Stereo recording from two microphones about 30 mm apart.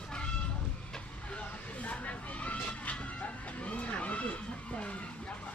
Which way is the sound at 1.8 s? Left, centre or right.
Left.